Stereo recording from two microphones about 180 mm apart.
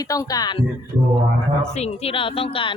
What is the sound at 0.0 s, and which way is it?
Speech, 20° left (ahead or behind).